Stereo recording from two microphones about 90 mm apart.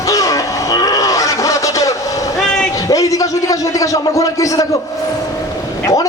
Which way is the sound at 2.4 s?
10° left (ahead or behind).